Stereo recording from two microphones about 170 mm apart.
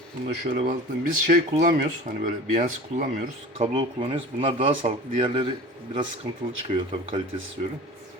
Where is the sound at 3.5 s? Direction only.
30° right (ahead or behind).